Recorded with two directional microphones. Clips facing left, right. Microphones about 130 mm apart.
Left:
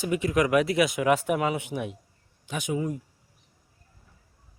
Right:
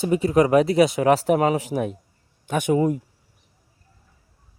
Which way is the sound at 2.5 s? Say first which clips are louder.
Right 9 dB; 55° right (ahead or behind).